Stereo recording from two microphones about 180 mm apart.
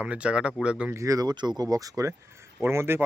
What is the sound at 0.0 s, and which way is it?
Speech, 5° right (ahead or behind).